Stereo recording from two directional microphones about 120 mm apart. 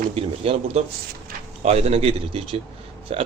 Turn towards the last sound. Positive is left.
turn(degrees=-55)  # may be behind; listen again after turning